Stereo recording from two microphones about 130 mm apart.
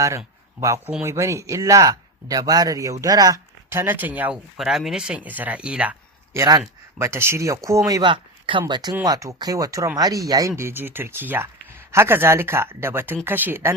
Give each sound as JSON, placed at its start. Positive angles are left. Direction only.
{"t": 1.0, "sound": "speech", "side_deg": -20}
{"t": 8.0, "sound": "speech", "side_deg": -40}